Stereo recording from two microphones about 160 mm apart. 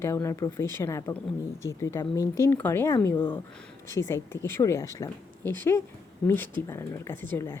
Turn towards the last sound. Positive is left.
turn(degrees=15)  # may be behind; listen again after turning